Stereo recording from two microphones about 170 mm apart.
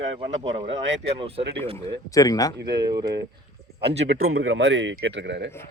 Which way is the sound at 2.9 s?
20° right (ahead or behind).